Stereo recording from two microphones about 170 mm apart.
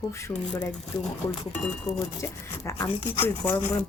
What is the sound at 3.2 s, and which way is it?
Speech, 15° left (ahead or behind).